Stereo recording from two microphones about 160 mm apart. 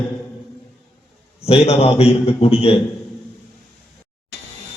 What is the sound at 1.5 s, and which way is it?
A man's voice, 35° left (ahead or behind).